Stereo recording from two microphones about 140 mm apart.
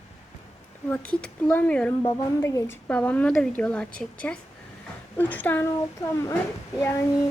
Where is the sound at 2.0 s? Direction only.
20° left (ahead or behind).